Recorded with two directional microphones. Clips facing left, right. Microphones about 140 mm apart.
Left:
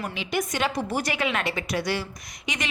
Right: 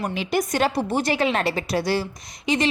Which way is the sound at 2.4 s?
30° right (ahead or behind).